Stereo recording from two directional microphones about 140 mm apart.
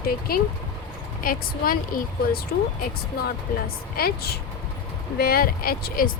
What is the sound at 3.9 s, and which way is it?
Speech, 90° left.